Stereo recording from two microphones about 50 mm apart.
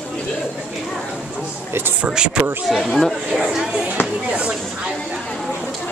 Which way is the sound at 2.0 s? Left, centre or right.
Centre.